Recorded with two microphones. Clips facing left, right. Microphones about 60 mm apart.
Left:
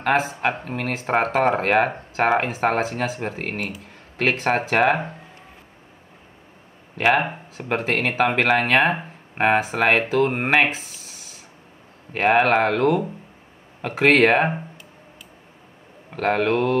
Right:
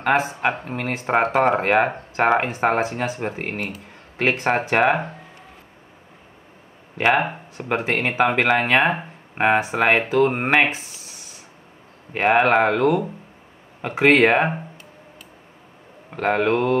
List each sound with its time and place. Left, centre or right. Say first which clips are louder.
0.0 s speech: right 1 dB; centre
7.5 s speech: even; centre
16.1 s speech: right 1 dB; centre